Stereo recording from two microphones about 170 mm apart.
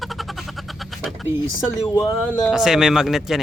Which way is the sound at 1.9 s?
25° left (ahead or behind).